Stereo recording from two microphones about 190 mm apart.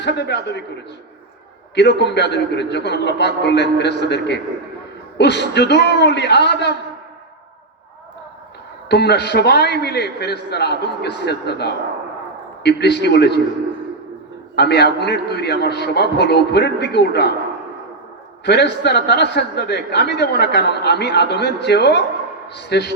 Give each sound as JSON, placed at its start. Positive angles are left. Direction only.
{"t": 0.0, "sound": "a man's voice", "side_deg": 60}
{"t": 1.7, "sound": "a man's voice", "side_deg": 65}
{"t": 8.9, "sound": "a man's voice", "side_deg": 60}
{"t": 14.5, "sound": "a man's voice", "side_deg": 60}
{"t": 18.4, "sound": "a man's voice", "side_deg": 60}